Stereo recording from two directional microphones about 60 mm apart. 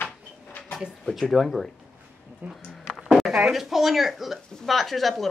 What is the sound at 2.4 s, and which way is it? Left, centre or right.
Speech, right.